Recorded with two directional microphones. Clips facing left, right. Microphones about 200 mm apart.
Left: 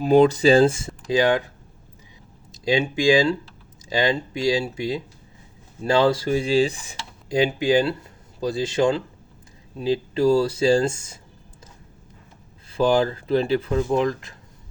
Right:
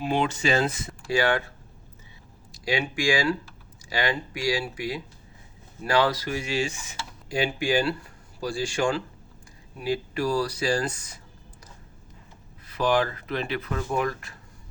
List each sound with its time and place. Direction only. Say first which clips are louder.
0.0 s speech: left 10 dB; 40° left (ahead or behind); by 1.5 s 15° left (ahead or behind)
2.5 s speech: left 6 dB; 20° left (ahead or behind)
7.3 s speech: left 6 dB; 20° left (ahead or behind)
12.6 s speech: left 4 dB; 25° left (ahead or behind)